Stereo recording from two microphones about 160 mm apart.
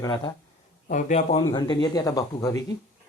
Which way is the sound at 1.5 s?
25° left (ahead or behind).